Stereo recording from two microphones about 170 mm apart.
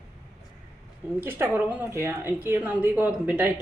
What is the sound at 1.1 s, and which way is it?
A woman's voice, 10° right (ahead or behind).